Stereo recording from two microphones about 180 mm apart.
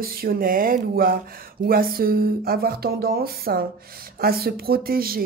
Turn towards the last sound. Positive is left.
turn(degrees=-55)  # may be behind; listen again after turning